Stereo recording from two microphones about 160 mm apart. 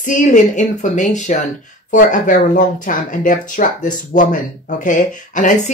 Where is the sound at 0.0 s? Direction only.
55° left (ahead or behind).